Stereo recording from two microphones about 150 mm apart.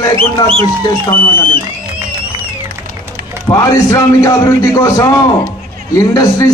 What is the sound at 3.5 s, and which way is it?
A man's voice, 25° left (ahead or behind).